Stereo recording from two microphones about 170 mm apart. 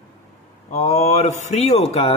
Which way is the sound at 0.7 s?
40° left (ahead or behind).